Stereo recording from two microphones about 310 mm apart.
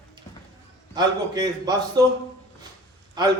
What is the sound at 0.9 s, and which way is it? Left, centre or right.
Speech, centre.